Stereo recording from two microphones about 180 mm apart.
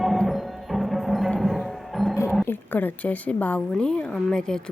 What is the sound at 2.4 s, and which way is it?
A woman's voice, 10° left (ahead or behind).